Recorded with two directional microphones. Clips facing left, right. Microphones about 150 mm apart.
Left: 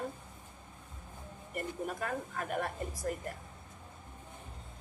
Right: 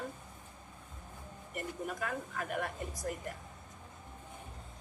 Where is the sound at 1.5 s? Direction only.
40° left (ahead or behind).